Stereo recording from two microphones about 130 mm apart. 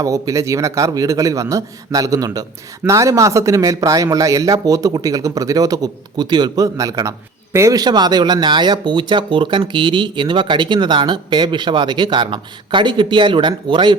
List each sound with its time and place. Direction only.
0.0 s a man's voice: 25° right (ahead or behind)